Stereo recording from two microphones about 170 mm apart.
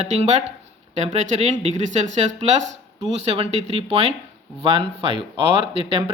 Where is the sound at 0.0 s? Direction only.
40° right (ahead or behind).